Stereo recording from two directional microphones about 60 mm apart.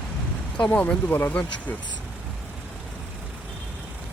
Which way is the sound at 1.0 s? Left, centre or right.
Left.